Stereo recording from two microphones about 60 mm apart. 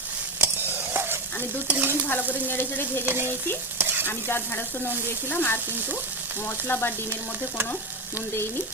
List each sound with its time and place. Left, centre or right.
0.3 s stir: right
2.0 s frying: left
3.1 s stir: right
4.0 s frying: left
6.7 s frying: left